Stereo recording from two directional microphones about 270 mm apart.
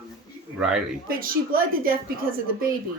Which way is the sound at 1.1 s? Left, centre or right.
Right.